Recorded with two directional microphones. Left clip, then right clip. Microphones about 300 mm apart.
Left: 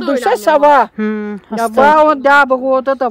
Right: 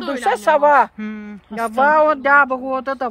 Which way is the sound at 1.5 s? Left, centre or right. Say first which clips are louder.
Left 5 dB; left.